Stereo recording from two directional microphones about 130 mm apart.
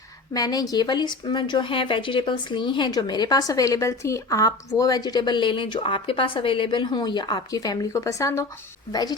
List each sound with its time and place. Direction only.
0.3 s speech: 30° left (ahead or behind)